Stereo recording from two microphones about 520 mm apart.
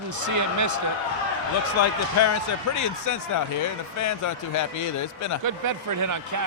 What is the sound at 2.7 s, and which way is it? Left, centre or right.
Speech, left.